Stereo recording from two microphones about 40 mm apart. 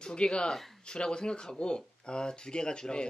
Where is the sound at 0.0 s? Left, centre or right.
Left.